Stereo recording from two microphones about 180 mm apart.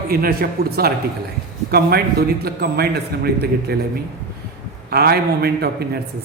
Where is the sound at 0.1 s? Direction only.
55° right (ahead or behind).